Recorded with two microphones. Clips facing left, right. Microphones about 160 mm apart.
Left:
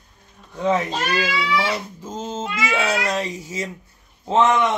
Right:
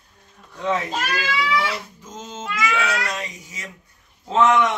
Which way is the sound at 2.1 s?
30° left (ahead or behind).